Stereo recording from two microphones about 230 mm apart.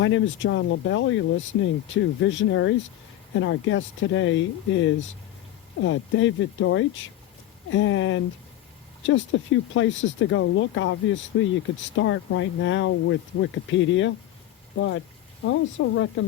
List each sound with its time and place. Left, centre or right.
0.0 s speech: left